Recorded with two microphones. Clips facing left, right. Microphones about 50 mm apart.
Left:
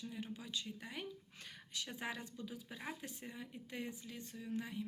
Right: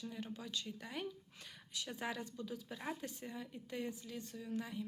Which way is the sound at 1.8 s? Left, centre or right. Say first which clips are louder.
Right 3 dB; left.